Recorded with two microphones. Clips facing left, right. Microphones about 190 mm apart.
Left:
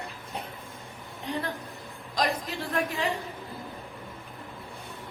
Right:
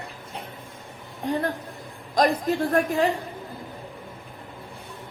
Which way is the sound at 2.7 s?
50° right (ahead or behind).